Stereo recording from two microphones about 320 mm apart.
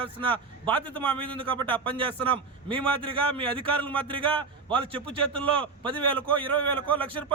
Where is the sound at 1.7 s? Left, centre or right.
Centre.